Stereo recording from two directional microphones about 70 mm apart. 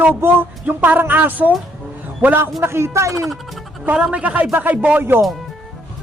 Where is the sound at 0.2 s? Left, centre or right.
Right.